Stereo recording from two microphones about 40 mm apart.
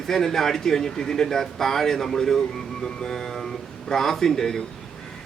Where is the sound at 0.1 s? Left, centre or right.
Centre.